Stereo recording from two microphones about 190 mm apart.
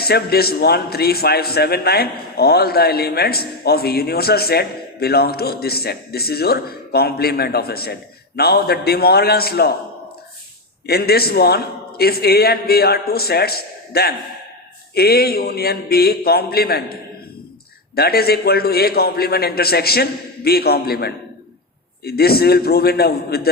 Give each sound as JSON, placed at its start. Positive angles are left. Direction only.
{"t": 0.0, "sound": "a man's voice", "side_deg": 55}
{"t": 10.8, "sound": "a man's voice", "side_deg": 55}